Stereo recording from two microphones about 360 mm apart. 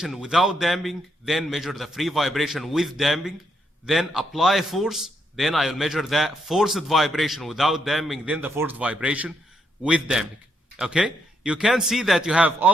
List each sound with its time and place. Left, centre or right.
0.0 s a man's voice: centre